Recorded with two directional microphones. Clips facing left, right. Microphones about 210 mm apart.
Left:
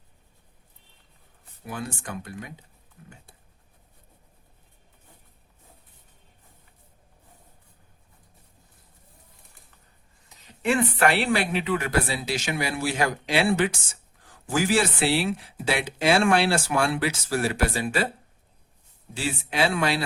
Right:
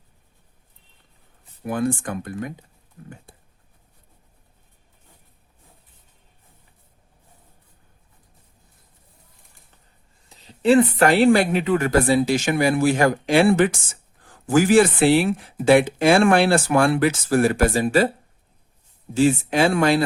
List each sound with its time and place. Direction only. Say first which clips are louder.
1.6 s speech: right 11 dB; 55° right (ahead or behind)
3.0 s a sound: right 8 dB; 50° right (ahead or behind)
10.2 s speech: right 8 dB; 30° right (ahead or behind)
19.1 s speech: right 11 dB; 45° right (ahead or behind)